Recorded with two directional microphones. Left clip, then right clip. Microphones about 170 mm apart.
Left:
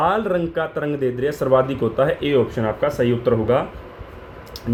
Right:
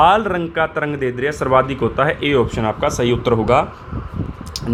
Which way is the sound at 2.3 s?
35° right (ahead or behind).